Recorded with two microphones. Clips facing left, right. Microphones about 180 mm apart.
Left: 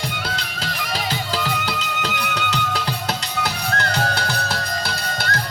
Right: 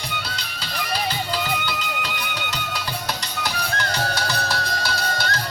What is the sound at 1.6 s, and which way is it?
Music, 75° left (ahead or behind).